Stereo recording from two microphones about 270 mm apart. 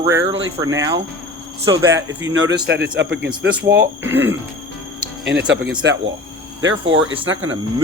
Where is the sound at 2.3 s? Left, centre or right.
Right.